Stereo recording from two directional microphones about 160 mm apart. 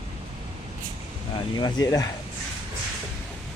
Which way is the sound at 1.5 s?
25° left (ahead or behind).